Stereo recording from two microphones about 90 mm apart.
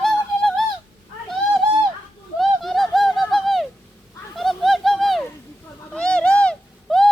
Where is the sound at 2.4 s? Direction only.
Centre (ahead or behind).